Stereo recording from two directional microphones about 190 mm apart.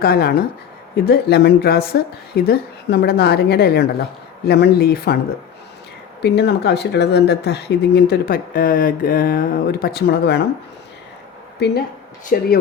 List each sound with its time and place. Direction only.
0.0 s speech: 55° left (ahead or behind)
6.2 s speech: 60° left (ahead or behind)
11.6 s speech: 60° left (ahead or behind)
12.3 s speech: 45° left (ahead or behind)